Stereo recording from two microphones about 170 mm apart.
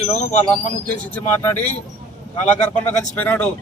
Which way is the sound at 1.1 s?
10° left (ahead or behind).